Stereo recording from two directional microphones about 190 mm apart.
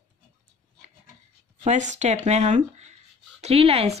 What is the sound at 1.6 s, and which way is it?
Speech, 40° right (ahead or behind).